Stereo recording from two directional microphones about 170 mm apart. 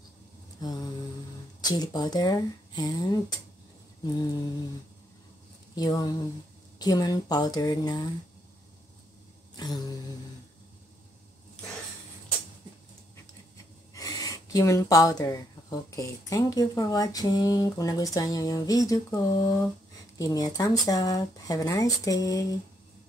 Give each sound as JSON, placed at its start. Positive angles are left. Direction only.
{"t": 0.6, "sound": "mantra", "side_deg": 20}
{"t": 1.7, "sound": "speech", "side_deg": 25}
{"t": 5.8, "sound": "speech", "side_deg": 20}
{"t": 9.6, "sound": "speech", "side_deg": 25}
{"t": 13.9, "sound": "speech", "side_deg": 20}